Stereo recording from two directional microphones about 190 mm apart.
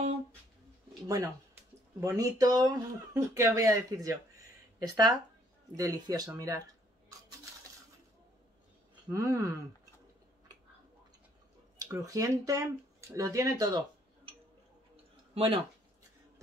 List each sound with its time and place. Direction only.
1.0 s speech: 15° right (ahead or behind)
9.1 s speech: 15° right (ahead or behind)
11.8 s speech: 15° right (ahead or behind)